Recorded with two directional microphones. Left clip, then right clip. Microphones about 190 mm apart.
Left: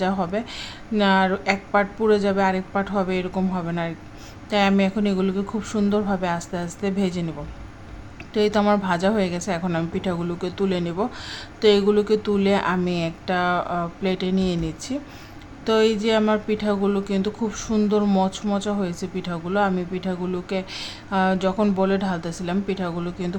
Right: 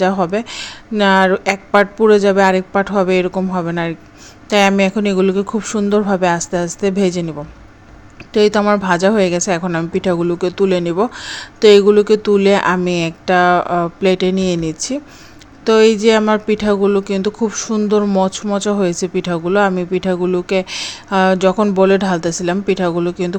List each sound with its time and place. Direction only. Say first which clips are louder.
0.0 s a woman's voice: right 9 dB; 30° right (ahead or behind)